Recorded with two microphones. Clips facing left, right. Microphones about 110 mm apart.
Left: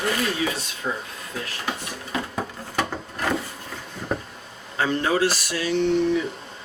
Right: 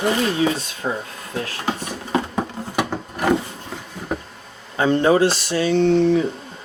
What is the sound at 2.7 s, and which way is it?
Wood, 15° right (ahead or behind).